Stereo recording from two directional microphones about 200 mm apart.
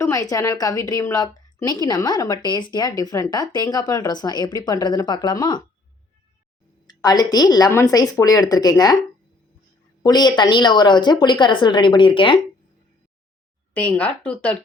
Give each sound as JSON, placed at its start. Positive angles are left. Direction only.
{"t": 0.0, "sound": "a woman's voice", "side_deg": 15}
{"t": 6.8, "sound": "a woman's voice", "side_deg": 20}
{"t": 10.0, "sound": "a woman's voice", "side_deg": 20}
{"t": 13.7, "sound": "speech", "side_deg": 5}